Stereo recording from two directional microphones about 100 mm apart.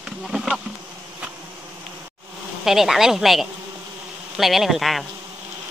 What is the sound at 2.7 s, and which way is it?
Speech, 5° right (ahead or behind).